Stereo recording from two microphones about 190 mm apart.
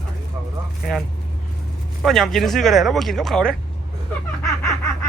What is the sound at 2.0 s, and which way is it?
A man's voice, centre (ahead or behind).